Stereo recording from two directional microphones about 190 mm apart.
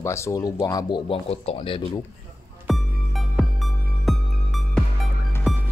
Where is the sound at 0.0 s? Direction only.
15° left (ahead or behind); by 1.8 s 30° left (ahead or behind).